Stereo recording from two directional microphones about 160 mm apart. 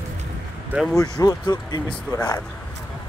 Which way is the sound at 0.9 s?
20° left (ahead or behind).